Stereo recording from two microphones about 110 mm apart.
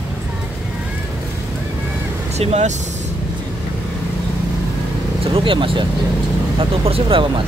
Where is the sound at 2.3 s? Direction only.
80° right.